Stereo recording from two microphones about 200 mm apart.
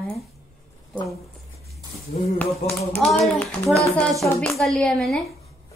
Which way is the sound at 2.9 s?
5° left (ahead or behind).